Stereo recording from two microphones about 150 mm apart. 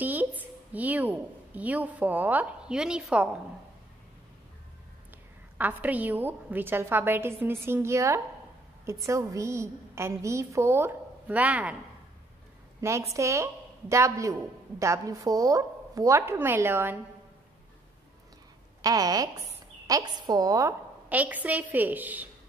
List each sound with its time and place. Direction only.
0.0 s a woman's voice: 10° right (ahead or behind)
5.6 s a woman's voice: 10° right (ahead or behind)
13.1 s a woman's voice: 20° right (ahead or behind)
18.8 s a woman's voice: 25° right (ahead or behind)
21.1 s a woman's voice: 10° right (ahead or behind)